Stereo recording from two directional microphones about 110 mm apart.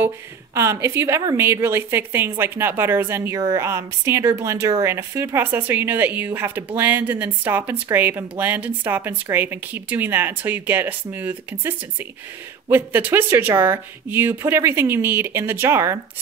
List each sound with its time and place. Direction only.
0.6 s a woman's voice: 25° right (ahead or behind)